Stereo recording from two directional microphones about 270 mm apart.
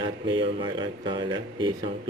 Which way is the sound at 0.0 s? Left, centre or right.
Centre.